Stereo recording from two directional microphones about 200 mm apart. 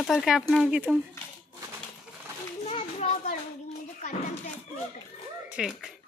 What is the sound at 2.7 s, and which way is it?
Children playing, 35° left (ahead or behind).